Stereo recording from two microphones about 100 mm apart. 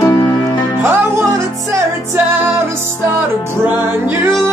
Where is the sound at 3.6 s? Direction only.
20° right (ahead or behind).